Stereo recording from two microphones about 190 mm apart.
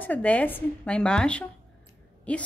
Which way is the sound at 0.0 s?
10° left (ahead or behind).